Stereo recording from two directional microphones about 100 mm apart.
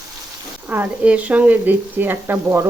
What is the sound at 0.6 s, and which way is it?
Speech, 20° right (ahead or behind).